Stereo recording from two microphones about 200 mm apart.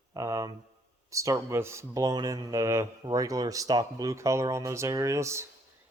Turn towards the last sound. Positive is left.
turn(degrees=-15)  # may be behind; listen again after turning